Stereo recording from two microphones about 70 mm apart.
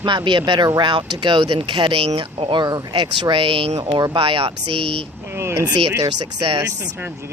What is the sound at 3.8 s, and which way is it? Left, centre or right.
Speech, right.